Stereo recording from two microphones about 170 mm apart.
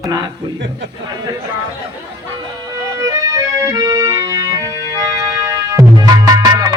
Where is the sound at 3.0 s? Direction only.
20° right (ahead or behind).